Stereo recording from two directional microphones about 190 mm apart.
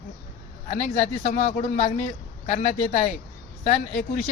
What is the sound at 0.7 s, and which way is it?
A woman's voice, 35° left (ahead or behind).